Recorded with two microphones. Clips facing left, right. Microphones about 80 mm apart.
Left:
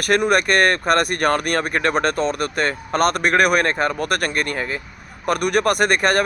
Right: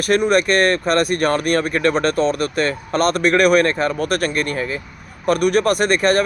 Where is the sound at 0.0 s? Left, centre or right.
Left.